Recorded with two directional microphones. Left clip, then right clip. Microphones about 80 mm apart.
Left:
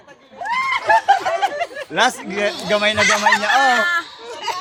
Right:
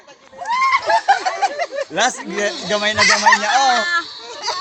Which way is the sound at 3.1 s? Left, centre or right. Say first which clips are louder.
Right 2 dB; left.